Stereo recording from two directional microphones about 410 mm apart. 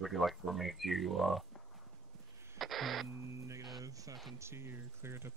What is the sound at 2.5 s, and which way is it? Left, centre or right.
Speech, centre.